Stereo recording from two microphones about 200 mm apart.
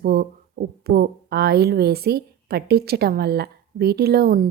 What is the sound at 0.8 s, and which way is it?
A woman's voice, 50° right (ahead or behind).